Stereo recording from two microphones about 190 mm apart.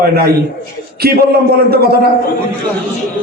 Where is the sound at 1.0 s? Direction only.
55° right (ahead or behind).